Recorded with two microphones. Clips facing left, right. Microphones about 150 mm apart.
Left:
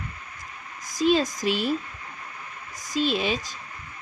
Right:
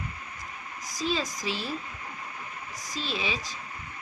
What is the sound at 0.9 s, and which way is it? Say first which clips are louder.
Speech: left 9 dB; 50° left (ahead or behind).